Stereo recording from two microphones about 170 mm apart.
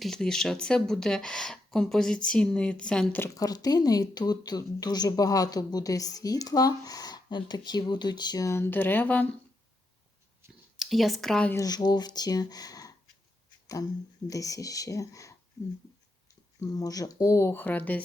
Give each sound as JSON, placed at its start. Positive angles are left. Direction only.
{"t": 0.0, "sound": "speech", "side_deg": 0}
{"t": 10.8, "sound": "speech", "side_deg": 0}
{"t": 11.5, "sound": "speech", "side_deg": 20}
{"t": 14.3, "sound": "speech", "side_deg": 20}
{"t": 16.6, "sound": "speech", "side_deg": 20}